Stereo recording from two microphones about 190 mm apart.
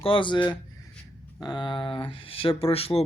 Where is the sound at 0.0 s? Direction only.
25° left (ahead or behind).